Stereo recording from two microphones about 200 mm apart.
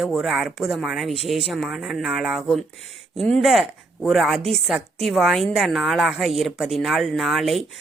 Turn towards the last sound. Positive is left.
turn(degrees=0)  # may be behind; listen again after turning